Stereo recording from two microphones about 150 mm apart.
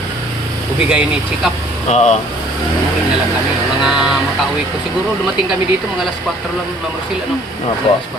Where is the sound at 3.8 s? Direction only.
5° right (ahead or behind).